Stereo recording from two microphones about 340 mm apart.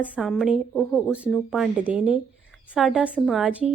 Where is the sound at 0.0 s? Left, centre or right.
Centre.